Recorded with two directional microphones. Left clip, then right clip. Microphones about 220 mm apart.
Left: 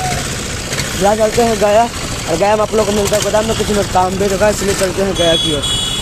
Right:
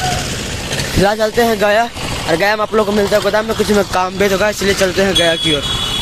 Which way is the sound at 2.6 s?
30° right (ahead or behind).